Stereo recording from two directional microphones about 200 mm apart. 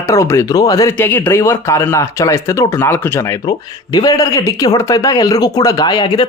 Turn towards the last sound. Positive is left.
turn(degrees=20)  # may be behind; listen again after turning